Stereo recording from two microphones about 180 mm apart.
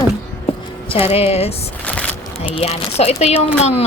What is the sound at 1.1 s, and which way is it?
Speech, 35° left (ahead or behind).